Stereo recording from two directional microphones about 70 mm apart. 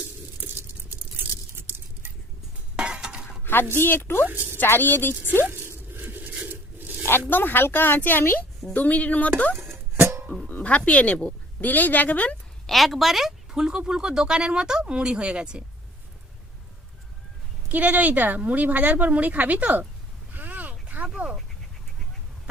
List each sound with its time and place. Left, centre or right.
1.2 s a sound: right
2.7 s chink: centre
3.4 s a sound: left
3.8 s speech: left
4.3 s speech: right
4.5 s speech: left
5.5 s a sound: right
7.3 s speech: left
9.6 s music: right
10.5 s speech: centre
11.6 s speech: left
12.6 s speech: centre
17.7 s speech: right
20.3 s a sound: right